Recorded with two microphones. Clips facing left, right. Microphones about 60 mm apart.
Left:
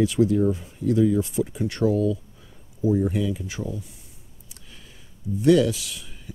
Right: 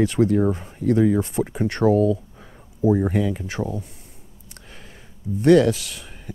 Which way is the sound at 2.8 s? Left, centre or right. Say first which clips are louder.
Right 3 dB; right.